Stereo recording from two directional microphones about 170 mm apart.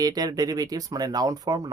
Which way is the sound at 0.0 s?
20° right (ahead or behind).